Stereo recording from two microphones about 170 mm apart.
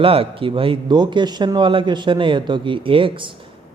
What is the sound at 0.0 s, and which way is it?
A man's voice, 35° right (ahead or behind).